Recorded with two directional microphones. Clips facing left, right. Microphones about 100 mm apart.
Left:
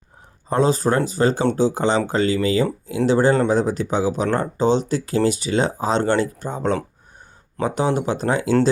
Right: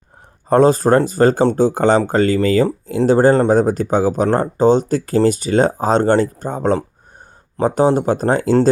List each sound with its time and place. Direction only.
0.5 s speech: 50° right (ahead or behind)